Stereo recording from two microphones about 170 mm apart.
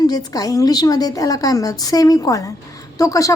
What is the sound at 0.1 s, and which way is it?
Speech, 20° left (ahead or behind).